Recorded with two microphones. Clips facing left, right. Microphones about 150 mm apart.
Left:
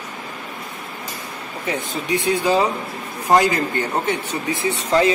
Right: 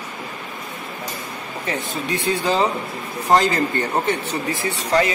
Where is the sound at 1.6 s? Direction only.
15° left (ahead or behind).